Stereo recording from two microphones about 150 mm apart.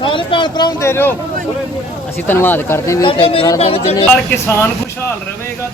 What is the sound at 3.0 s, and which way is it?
Speech, 35° left (ahead or behind).